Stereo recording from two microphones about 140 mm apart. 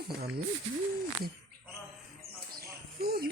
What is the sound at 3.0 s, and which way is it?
Speech, 90° right.